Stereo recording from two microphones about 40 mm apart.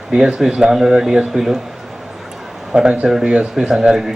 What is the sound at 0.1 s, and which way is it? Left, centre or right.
Speech, centre.